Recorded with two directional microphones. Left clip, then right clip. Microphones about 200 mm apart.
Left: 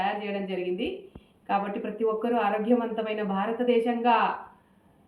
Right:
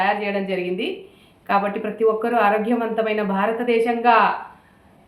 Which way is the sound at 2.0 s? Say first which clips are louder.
Right 8 dB; 25° right (ahead or behind).